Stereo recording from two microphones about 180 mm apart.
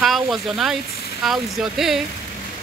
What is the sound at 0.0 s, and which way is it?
Speech, centre (ahead or behind).